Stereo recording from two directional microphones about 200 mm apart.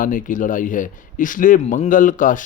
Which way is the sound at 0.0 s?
40° left (ahead or behind).